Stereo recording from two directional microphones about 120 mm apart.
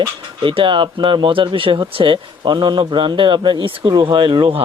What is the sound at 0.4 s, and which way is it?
Speech, 45° right (ahead or behind).